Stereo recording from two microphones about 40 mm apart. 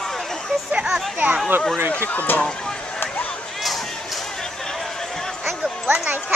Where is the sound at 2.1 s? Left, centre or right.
Left.